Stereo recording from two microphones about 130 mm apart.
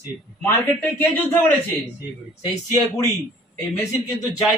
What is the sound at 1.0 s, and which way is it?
Speech, 15° left (ahead or behind).